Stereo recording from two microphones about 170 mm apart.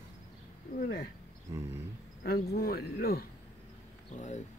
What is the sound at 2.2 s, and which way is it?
Speech, 65° left (ahead or behind).